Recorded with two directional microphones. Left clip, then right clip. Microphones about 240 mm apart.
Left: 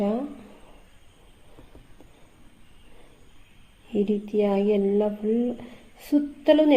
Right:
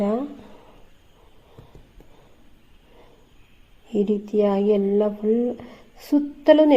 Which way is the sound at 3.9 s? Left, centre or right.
Right.